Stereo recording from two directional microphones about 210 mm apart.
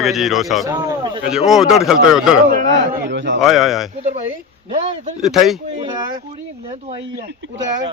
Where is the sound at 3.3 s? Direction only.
Centre (ahead or behind).